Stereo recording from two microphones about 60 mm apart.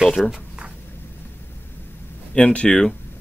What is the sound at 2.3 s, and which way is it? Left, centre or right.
Speech, centre.